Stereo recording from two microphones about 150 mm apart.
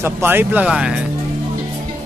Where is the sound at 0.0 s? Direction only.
15° right (ahead or behind).